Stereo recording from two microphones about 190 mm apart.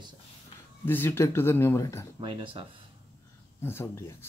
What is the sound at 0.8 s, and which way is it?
Speech, 10° left (ahead or behind).